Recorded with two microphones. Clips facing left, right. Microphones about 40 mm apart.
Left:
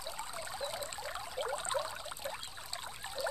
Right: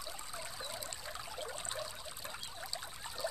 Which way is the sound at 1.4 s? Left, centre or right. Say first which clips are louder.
Left 8 dB; left.